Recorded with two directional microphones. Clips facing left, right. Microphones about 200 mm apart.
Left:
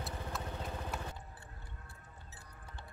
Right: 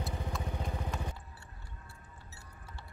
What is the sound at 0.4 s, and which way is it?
Vehicle, 10° right (ahead or behind).